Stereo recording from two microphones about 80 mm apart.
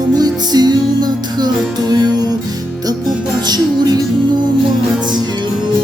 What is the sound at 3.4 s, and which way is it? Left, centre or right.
Music, right.